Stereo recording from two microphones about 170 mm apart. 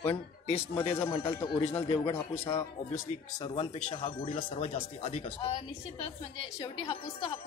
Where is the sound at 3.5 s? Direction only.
35° left (ahead or behind).